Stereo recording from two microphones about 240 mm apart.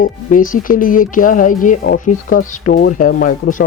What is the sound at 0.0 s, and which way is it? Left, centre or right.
Speech, left.